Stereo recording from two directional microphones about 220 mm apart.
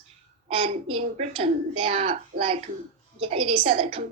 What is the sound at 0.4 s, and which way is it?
A woman's voice, 25° right (ahead or behind).